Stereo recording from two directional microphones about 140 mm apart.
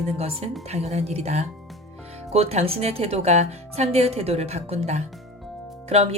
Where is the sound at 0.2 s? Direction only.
45° right (ahead or behind).